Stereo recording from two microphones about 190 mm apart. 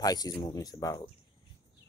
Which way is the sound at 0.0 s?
20° left (ahead or behind).